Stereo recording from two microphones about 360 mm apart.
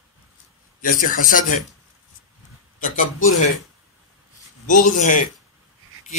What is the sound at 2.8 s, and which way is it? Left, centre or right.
Speech, left.